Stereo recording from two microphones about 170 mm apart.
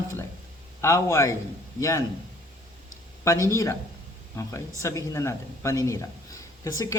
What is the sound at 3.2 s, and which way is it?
A man's voice, 15° left (ahead or behind).